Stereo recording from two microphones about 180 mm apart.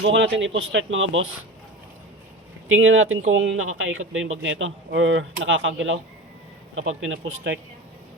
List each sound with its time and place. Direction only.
0.0 s speech: 90° right
2.6 s speech: 90° right